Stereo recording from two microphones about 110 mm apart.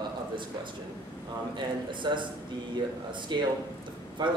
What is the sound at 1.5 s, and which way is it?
Speech, 45° right (ahead or behind).